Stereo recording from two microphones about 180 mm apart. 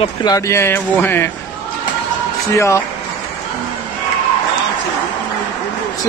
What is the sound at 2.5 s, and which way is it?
Speech, 15° left (ahead or behind).